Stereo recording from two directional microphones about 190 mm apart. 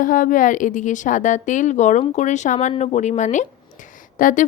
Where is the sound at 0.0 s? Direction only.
45° left (ahead or behind).